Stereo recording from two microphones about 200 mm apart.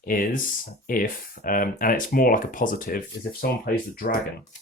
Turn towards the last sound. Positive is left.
turn(degrees=45)  # may be behind; listen again after turning